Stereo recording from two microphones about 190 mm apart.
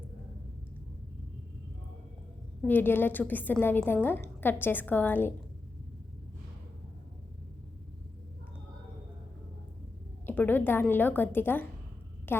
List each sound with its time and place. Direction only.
2.6 s a woman's voice: 10° left (ahead or behind)
10.2 s a woman's voice: 10° left (ahead or behind)